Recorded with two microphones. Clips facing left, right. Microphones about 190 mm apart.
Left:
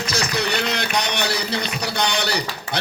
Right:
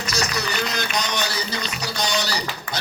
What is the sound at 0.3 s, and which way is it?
A man's voice, 65° left (ahead or behind).